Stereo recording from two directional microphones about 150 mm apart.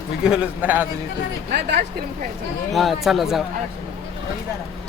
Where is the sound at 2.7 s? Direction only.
Centre (ahead or behind).